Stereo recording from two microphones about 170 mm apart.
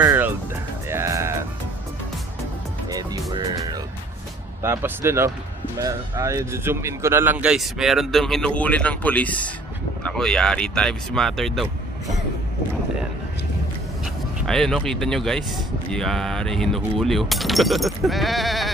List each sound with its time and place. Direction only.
0.0 s music: 10° right (ahead or behind)
2.9 s music: 20° right (ahead or behind)
4.6 s a man's voice: 15° right (ahead or behind); by 11.7 s centre (ahead or behind)
14.4 s a man's voice: centre (ahead or behind)